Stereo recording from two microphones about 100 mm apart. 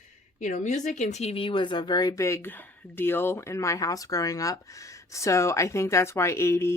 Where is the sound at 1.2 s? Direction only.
75° left (ahead or behind).